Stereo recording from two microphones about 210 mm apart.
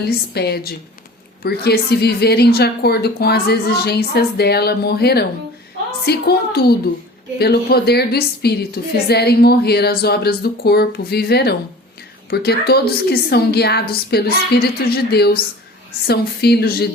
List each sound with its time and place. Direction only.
0.0 s a woman's voice: 50° left (ahead or behind)